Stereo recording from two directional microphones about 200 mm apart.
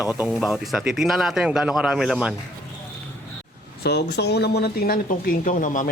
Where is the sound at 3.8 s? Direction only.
55° left (ahead or behind).